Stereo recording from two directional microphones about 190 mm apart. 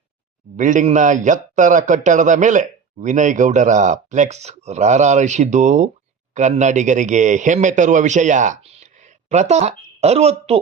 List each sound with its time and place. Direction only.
0.5 s a man's voice: 40° right (ahead or behind)